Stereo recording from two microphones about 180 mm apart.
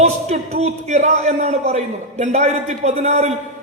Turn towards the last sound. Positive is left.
turn(degrees=-40)  # may be behind; listen again after turning